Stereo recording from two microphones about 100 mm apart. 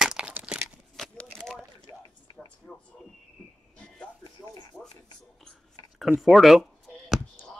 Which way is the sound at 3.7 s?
10° left (ahead or behind).